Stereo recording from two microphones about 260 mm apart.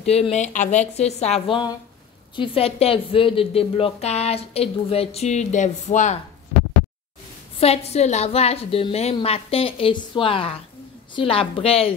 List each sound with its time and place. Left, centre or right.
0.0 s a woman's voice: left
7.6 s a woman's voice: left